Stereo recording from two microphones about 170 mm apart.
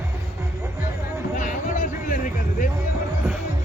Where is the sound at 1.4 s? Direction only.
50° left (ahead or behind).